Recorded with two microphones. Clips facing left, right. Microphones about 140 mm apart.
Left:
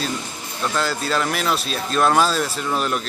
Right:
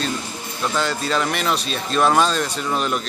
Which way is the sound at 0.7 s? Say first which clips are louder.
Right 1 dB; centre (ahead or behind).